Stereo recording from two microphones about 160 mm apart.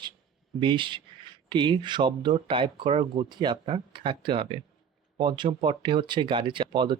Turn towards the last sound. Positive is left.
turn(degrees=-30)  # may be behind; listen again after turning